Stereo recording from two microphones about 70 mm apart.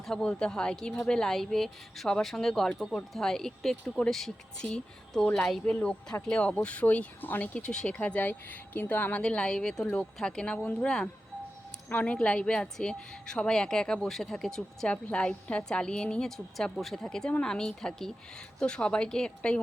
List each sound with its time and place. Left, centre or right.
0.0 s a woman's voice: centre
7.9 s speech: left
9.2 s a woman's voice: centre